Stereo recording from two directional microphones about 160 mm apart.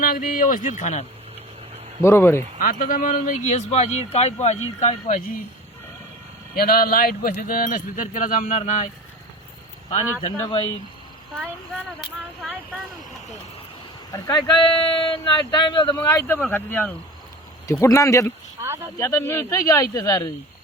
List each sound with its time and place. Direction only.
0.0 s speech: 60° left (ahead or behind)
2.0 s speech: 15° left (ahead or behind)
2.6 s speech: 60° left (ahead or behind)
6.5 s speech: 65° left (ahead or behind); by 8.9 s 50° left (ahead or behind)
10.2 s speech: 25° left (ahead or behind)
14.1 s speech: 25° left (ahead or behind)
16.0 s speech: 15° left (ahead or behind)
18.6 s speech: 15° right (ahead or behind)
18.9 s speech: 20° left (ahead or behind)